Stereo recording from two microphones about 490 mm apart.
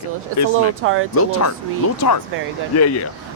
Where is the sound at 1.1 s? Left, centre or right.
Left.